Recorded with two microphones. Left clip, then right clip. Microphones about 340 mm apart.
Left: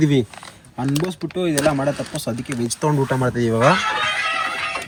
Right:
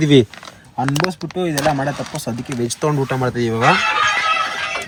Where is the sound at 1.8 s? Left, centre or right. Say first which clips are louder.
Even; centre.